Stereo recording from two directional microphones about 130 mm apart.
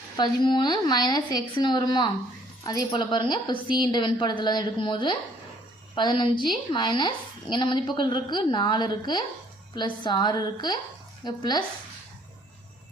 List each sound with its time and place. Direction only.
0.2 s a woman's voice: 35° left (ahead or behind)